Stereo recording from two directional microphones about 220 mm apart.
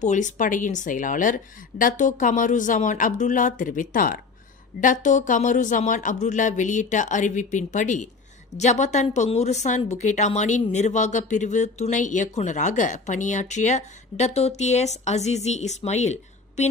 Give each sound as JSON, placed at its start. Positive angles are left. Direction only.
{"t": 0.0, "sound": "a woman's voice", "side_deg": 35}